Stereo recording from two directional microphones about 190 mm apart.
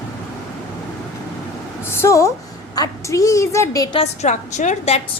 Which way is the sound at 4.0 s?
40° left (ahead or behind).